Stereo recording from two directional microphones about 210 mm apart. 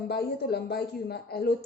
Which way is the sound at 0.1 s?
50° left (ahead or behind).